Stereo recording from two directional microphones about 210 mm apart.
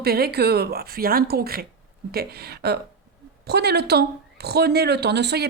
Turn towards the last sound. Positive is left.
turn(degrees=-55)  # may be behind; listen again after turning